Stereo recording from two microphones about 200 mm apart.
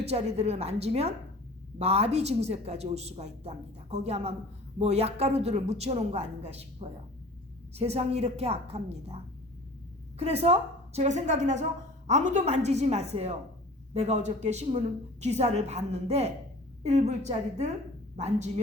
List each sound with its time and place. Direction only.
0.0 s a woman's voice: 30° right (ahead or behind)